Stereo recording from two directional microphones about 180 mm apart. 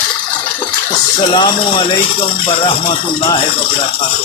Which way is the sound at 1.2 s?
25° left (ahead or behind).